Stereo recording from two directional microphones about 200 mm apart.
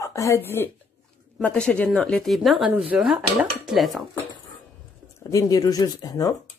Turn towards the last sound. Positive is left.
turn(degrees=20)  # may be behind; listen again after turning